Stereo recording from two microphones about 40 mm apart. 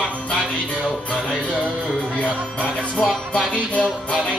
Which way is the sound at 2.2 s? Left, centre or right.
Left.